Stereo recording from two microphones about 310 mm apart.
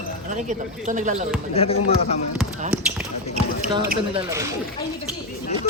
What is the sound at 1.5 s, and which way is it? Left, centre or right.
Speech, centre.